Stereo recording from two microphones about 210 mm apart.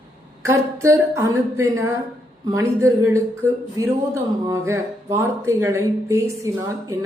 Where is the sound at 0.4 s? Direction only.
15° right (ahead or behind).